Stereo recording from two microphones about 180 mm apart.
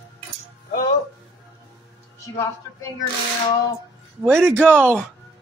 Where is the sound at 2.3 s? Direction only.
20° left (ahead or behind).